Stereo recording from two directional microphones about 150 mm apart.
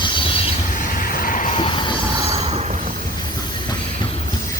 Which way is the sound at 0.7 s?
70° left (ahead or behind).